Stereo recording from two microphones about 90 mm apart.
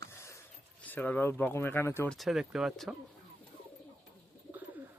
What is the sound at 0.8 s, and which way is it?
Speech, 20° left (ahead or behind).